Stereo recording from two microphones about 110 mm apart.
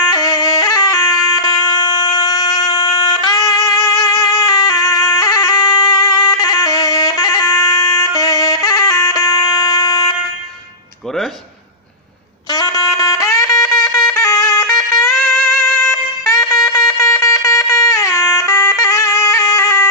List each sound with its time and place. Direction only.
0.1 s music: 35° left (ahead or behind)
12.4 s music: 35° left (ahead or behind)
15.0 s music: 5° left (ahead or behind)
16.6 s music: 25° left (ahead or behind)